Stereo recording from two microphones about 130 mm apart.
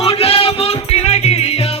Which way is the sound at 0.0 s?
50° left (ahead or behind).